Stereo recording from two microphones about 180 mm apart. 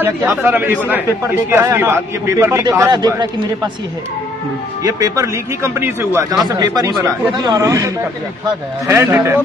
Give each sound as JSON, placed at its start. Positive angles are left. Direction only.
{"t": 0.0, "sound": "a man's voice", "side_deg": -10}
{"t": 4.8, "sound": "a man's voice", "side_deg": -20}